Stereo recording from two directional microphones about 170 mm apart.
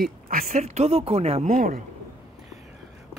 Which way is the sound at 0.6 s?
40° right (ahead or behind).